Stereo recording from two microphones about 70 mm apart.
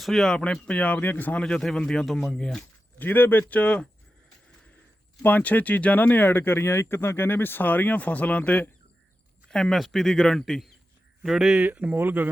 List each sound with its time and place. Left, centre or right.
0.0 s speech: centre; by 1.4 s left
1.4 s speech: centre
3.0 s speech: left
5.2 s speech: left
9.5 s speech: centre
11.2 s speech: centre
11.5 s speech: right